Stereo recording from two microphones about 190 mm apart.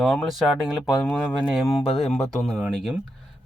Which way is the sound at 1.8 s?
30° left (ahead or behind).